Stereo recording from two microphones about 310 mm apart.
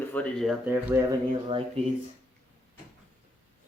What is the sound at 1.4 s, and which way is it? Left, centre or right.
Speech, centre.